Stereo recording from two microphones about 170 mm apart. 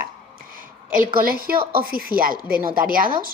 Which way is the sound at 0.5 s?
55° right (ahead or behind).